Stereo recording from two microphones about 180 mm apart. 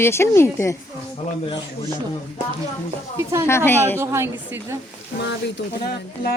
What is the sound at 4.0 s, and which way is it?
Speech, 15° right (ahead or behind).